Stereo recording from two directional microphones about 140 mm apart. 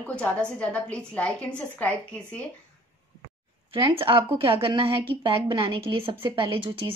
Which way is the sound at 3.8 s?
40° right (ahead or behind).